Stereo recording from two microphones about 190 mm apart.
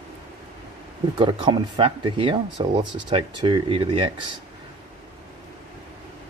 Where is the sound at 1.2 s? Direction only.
25° right (ahead or behind).